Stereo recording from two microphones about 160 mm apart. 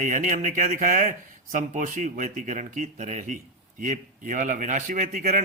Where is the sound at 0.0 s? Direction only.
50° right (ahead or behind).